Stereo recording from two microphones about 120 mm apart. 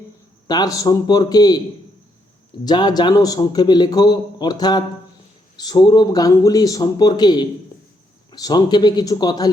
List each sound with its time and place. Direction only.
0.4 s a man's voice: 35° left (ahead or behind)
2.6 s a man's voice: 35° left (ahead or behind)